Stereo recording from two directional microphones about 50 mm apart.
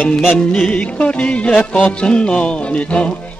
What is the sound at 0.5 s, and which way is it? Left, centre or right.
Music, left.